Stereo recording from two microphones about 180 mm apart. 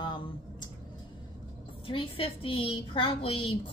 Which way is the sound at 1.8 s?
30° left (ahead or behind).